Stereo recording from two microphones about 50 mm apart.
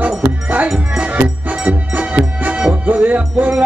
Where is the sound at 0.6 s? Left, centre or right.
Centre.